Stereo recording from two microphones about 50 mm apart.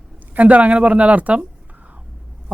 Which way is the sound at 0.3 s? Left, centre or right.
Right.